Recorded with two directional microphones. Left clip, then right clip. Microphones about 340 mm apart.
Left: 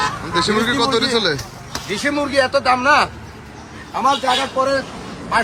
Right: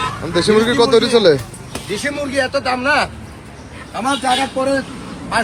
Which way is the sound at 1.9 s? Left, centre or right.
Left.